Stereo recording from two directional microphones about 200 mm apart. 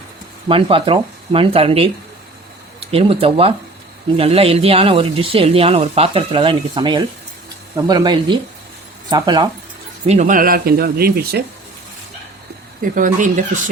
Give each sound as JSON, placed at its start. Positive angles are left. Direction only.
{"t": 0.4, "sound": "speech", "side_deg": -25}
{"t": 10.1, "sound": "speech", "side_deg": -40}
{"t": 12.8, "sound": "speech", "side_deg": -40}